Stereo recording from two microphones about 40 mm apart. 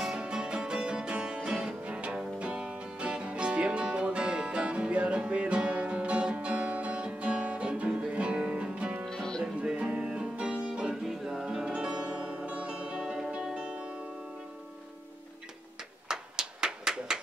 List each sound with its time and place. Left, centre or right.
0.0 s music: right
9.0 s music: centre
9.7 s music: right
11.1 s music: centre
11.4 s music: centre
13.0 s music: centre
13.7 s music: right
16.1 s a sound: centre